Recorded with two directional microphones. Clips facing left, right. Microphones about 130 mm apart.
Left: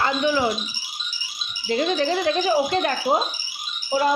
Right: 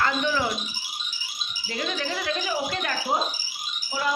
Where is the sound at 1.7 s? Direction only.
30° left (ahead or behind).